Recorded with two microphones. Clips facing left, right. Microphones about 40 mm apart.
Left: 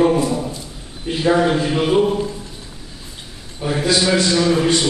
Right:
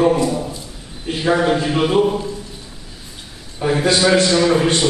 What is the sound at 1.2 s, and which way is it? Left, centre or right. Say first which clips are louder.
Speech: left 1 dB; centre.